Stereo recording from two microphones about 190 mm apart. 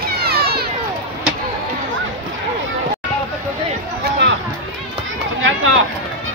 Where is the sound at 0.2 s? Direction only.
55° right (ahead or behind).